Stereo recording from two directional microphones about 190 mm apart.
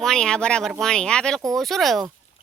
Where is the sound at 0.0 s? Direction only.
5° left (ahead or behind).